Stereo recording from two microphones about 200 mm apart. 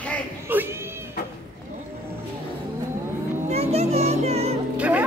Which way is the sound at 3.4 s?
30° right (ahead or behind).